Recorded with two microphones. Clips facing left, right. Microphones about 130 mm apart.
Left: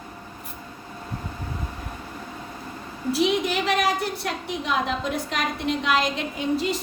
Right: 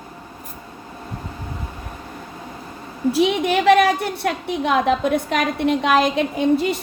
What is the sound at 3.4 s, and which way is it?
A woman's voice, 60° right (ahead or behind).